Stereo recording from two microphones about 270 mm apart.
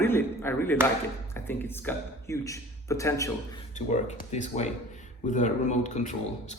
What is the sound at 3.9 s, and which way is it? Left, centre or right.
Speech, left.